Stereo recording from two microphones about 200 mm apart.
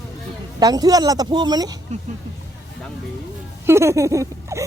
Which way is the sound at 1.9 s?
35° right (ahead or behind).